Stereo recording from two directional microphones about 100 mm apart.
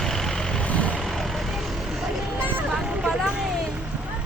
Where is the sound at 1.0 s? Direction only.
Centre (ahead or behind).